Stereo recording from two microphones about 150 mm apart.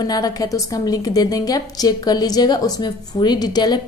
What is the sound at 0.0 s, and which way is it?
A woman's voice, 25° left (ahead or behind).